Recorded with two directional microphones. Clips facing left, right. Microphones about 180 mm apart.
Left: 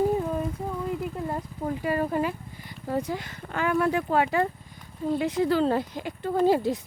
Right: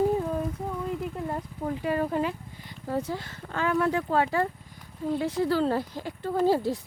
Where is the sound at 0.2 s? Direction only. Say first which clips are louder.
Left 1 dB; 5° left (ahead or behind).